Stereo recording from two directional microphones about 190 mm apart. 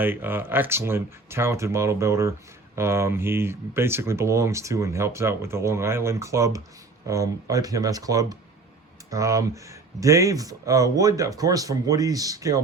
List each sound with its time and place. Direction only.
0.0 s speech: 10° right (ahead or behind)